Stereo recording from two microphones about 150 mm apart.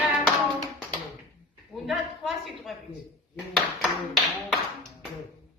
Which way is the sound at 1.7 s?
Centre (ahead or behind).